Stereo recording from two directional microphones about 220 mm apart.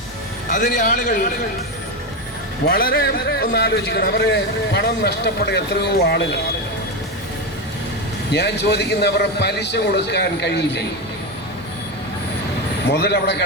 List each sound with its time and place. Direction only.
0.5 s speech: 35° left (ahead or behind)
2.6 s a man's voice: 40° left (ahead or behind)
8.3 s a man's voice: 50° left (ahead or behind)
12.9 s a man's voice: 50° left (ahead or behind)